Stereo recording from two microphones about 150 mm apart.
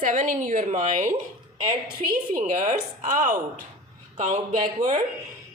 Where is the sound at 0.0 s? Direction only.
55° right (ahead or behind).